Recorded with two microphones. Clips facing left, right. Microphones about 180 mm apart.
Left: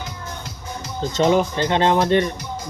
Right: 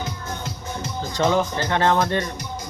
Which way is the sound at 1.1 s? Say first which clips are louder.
Left 3 dB; 20° left (ahead or behind).